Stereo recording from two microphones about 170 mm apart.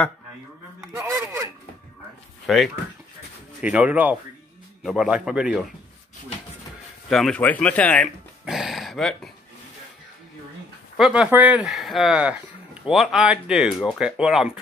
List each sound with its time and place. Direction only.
1.1 s a sound: 10° right (ahead or behind)
2.4 s speech: centre (ahead or behind)
7.1 s speech: 5° left (ahead or behind)
11.0 s speech: 5° right (ahead or behind)